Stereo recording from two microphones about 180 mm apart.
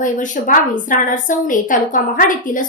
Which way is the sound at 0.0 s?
45° left (ahead or behind).